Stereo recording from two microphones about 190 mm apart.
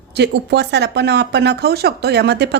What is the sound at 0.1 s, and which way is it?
Speech, 60° right (ahead or behind).